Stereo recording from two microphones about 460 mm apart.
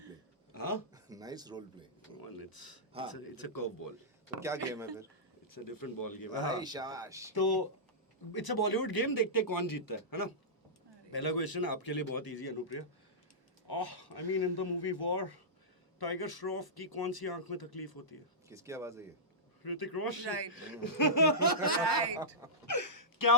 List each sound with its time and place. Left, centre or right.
0.5 s a sound: left
0.9 s a sound: centre
2.2 s speech: left
4.4 s speech: centre
5.5 s speech: left
6.6 s speech: centre
7.3 s a man's voice: left
18.4 s speech: centre
19.6 s speech: left
20.2 s speech: right
20.5 s speech: left